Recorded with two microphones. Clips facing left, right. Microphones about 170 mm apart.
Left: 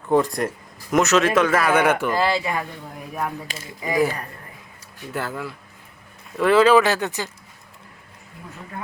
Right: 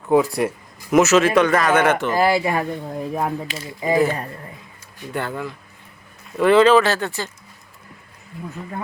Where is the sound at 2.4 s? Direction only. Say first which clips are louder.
Right 5 dB; 30° right (ahead or behind).